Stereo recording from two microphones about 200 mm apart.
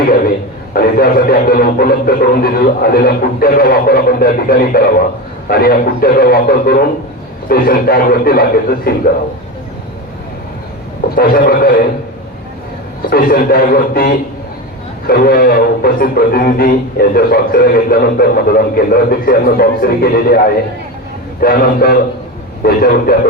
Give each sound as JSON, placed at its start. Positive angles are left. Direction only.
{"t": 0.7, "sound": "a man's voice", "side_deg": 50}
{"t": 11.1, "sound": "a man's voice", "side_deg": 50}
{"t": 13.1, "sound": "a man's voice", "side_deg": 45}